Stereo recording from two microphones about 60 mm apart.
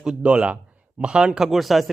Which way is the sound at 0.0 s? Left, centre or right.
Centre.